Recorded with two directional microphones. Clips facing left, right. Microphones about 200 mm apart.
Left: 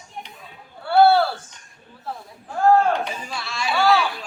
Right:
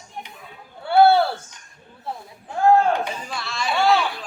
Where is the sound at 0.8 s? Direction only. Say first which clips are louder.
Even; 20° right (ahead or behind).